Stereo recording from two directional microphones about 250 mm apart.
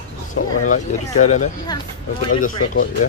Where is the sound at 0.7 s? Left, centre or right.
Left.